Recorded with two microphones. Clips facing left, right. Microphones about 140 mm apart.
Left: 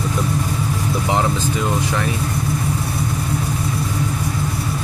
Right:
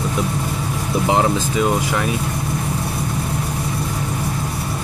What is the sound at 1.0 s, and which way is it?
Speech, 20° right (ahead or behind).